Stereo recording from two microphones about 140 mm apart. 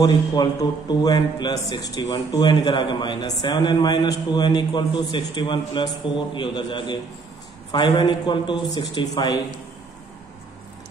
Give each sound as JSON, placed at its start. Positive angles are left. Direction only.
{"t": 0.0, "sound": "a man's voice", "side_deg": 30}